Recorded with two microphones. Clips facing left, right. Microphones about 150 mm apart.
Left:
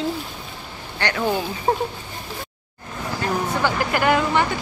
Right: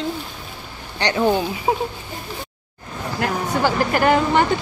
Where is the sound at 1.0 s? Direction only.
20° right (ahead or behind).